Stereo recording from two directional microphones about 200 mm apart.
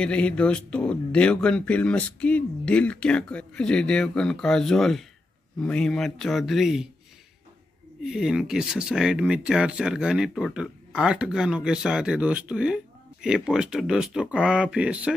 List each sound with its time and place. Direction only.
0.0 s speech: 5° left (ahead or behind)
8.0 s speech: centre (ahead or behind)